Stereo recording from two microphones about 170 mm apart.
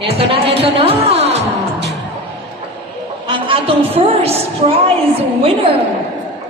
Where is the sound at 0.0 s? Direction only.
35° right (ahead or behind).